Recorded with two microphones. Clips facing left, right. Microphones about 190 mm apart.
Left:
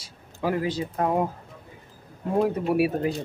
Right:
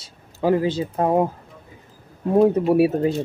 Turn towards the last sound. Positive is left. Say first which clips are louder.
# right 6 dB
turn(degrees=-25)  # may be behind; listen again after turning